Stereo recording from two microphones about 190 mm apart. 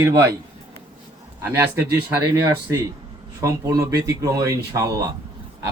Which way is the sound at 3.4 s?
15° right (ahead or behind).